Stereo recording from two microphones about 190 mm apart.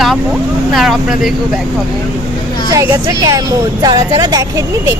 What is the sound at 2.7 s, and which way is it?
Speech, 15° right (ahead or behind).